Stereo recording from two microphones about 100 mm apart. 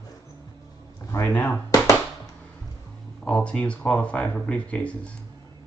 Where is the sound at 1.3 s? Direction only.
20° left (ahead or behind).